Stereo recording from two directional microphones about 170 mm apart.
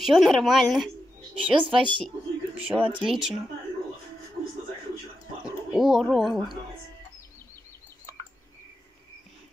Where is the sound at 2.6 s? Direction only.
10° right (ahead or behind).